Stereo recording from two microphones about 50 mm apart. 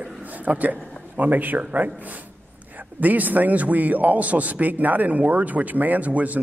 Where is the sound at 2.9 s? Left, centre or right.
Right.